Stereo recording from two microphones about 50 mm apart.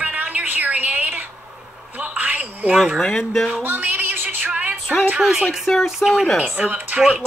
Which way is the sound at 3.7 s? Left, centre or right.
Right.